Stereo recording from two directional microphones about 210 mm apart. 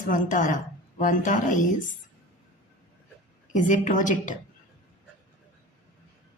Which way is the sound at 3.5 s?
35° left (ahead or behind).